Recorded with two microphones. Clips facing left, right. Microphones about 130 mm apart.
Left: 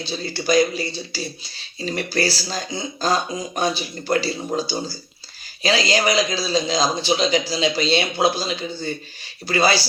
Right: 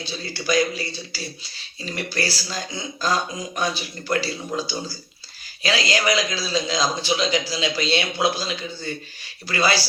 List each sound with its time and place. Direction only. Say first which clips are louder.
0.0 s a man's voice: left 4 dB; 30° left (ahead or behind)